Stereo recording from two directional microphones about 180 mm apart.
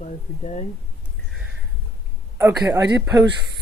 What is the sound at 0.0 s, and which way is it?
Speech, 40° left (ahead or behind).